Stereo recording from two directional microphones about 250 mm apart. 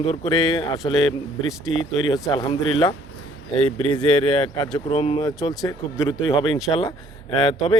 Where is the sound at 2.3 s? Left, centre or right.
Centre.